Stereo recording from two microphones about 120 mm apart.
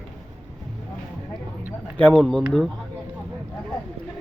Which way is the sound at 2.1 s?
5° left (ahead or behind).